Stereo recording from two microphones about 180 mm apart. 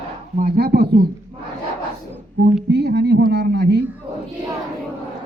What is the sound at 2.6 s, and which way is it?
Speech, 70° right (ahead or behind).